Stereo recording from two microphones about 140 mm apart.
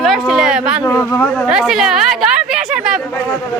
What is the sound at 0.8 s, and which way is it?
Speech, 15° left (ahead or behind).